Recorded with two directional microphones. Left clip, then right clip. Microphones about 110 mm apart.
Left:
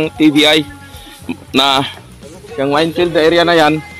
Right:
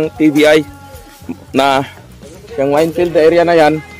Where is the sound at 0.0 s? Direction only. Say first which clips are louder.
Even; 5° right (ahead or behind).